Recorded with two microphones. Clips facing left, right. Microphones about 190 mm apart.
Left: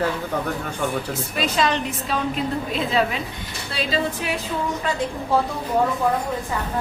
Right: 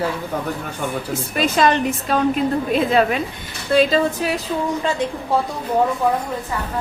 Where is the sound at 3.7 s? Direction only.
45° right (ahead or behind).